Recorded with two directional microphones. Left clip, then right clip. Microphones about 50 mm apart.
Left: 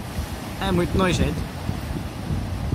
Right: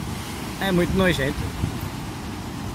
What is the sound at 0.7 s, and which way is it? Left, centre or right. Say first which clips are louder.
Speech: right 1 dB; centre.